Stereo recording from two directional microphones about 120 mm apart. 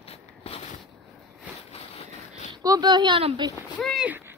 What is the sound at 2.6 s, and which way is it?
Speech, 35° right (ahead or behind).